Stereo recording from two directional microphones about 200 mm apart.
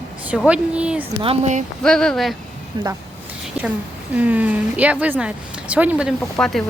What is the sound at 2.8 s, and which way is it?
Speech, 20° right (ahead or behind).